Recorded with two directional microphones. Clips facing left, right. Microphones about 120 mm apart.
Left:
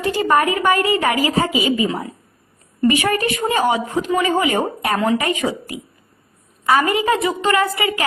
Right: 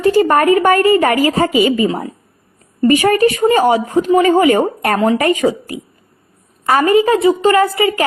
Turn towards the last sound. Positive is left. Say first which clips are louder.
# right 6 dB
turn(degrees=-30)  # may be behind; listen again after turning